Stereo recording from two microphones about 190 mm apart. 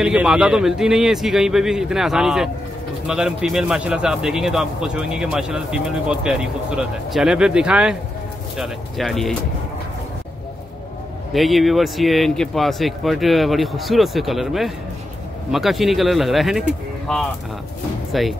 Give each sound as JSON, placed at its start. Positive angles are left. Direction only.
{"t": 0.0, "sound": "speech", "side_deg": -5}
{"t": 11.3, "sound": "speech", "side_deg": 0}